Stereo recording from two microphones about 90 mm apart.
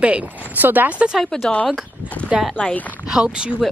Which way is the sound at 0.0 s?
15° right (ahead or behind).